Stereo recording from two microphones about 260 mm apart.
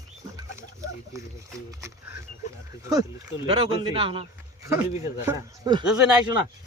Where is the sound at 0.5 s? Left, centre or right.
Centre.